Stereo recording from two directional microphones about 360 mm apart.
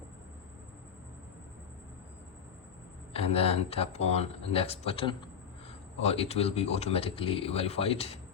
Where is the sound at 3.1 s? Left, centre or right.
Centre.